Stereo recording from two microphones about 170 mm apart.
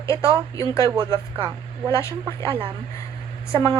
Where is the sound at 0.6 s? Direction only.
15° left (ahead or behind).